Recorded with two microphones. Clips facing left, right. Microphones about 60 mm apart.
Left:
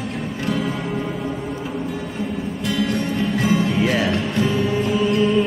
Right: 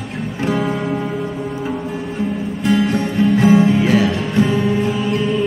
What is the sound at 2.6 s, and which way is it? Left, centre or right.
Music, right.